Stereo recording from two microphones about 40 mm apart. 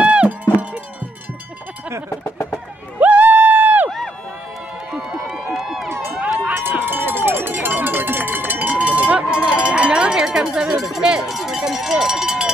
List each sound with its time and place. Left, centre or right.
0.0 s cowbell: right
3.0 s crowd: right
4.9 s run: centre
6.5 s run: right
9.3 s cowbell: right